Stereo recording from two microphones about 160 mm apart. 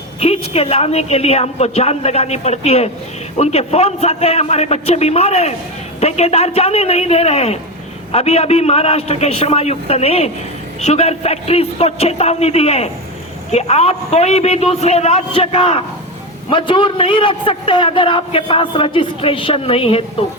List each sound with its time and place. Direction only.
0.2 s a man's voice: 40° left (ahead or behind)